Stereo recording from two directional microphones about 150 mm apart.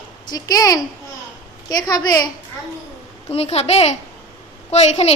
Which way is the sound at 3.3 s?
45° left (ahead or behind).